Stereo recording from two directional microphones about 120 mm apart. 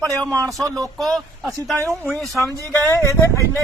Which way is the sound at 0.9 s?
Centre (ahead or behind).